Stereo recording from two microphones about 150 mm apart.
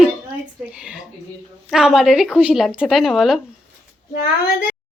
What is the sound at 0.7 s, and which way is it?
Speech, 5° right (ahead or behind).